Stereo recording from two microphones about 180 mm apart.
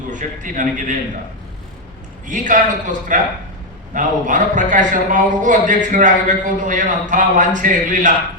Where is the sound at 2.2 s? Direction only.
45° right (ahead or behind).